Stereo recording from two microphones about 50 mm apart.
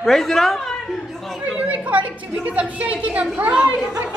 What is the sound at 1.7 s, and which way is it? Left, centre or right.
Chatter, right.